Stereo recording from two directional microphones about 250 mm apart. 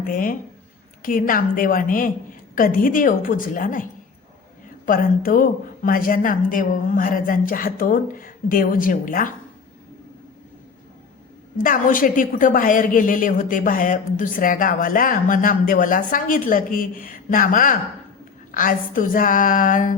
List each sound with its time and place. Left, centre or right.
0.0 s a woman's voice: left
4.9 s a woman's voice: left
11.5 s a woman's voice: left